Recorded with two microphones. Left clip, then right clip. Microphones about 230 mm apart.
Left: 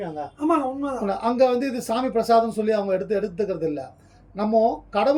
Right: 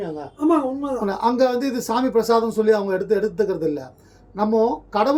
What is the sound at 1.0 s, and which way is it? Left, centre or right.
Speech, centre.